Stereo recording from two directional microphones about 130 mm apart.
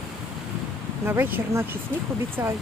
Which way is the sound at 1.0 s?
15° right (ahead or behind).